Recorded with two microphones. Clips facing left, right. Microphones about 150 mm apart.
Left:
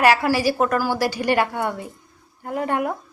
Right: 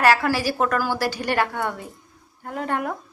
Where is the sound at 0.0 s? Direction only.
15° left (ahead or behind).